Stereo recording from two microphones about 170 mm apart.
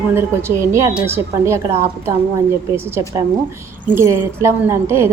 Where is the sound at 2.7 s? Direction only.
15° right (ahead or behind).